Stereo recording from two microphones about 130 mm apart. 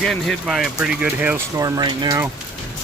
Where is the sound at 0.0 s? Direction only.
Centre (ahead or behind).